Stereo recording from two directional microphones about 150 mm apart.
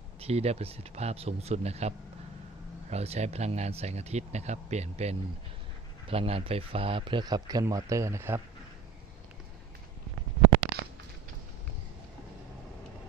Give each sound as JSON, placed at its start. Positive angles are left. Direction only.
{"t": 0.2, "sound": "speech", "side_deg": -45}